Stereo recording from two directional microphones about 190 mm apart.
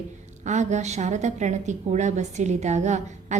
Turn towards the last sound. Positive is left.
turn(degrees=-40)  # may be behind; listen again after turning